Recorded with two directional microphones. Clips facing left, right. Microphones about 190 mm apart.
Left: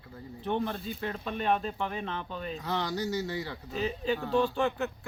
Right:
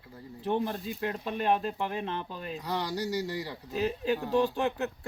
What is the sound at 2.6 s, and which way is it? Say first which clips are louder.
Speech: even; 10° right (ahead or behind).